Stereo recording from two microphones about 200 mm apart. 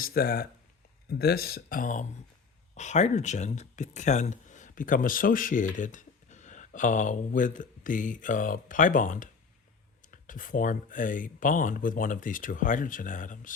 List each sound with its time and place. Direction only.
0.0 s speech: 45° left (ahead or behind)